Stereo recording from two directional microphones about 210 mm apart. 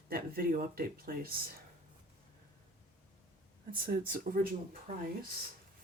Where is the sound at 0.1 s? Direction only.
45° right (ahead or behind).